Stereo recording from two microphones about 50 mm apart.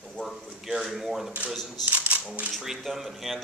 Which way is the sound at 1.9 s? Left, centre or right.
Right.